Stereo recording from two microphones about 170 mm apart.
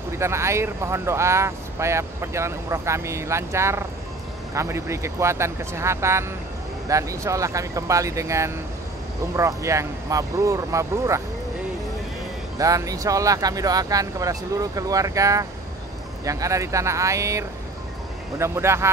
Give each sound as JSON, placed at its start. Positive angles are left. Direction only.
{"t": 0.2, "sound": "speech", "side_deg": -15}
{"t": 12.5, "sound": "speech", "side_deg": -20}